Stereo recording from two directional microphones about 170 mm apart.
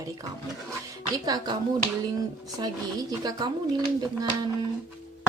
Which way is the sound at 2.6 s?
25° right (ahead or behind).